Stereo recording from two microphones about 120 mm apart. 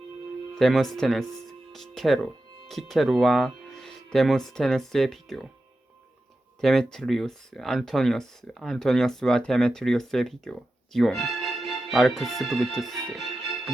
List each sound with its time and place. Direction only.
0.5 s speech: centre (ahead or behind)
6.6 s speech: centre (ahead or behind)